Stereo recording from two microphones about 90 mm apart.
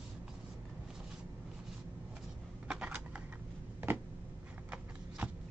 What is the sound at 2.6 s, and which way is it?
Shuffling cards, 15° right (ahead or behind).